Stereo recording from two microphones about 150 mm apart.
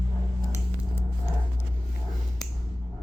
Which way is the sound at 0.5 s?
20° left (ahead or behind).